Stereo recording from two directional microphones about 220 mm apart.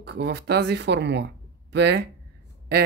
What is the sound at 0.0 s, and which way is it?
Speech, 50° right (ahead or behind).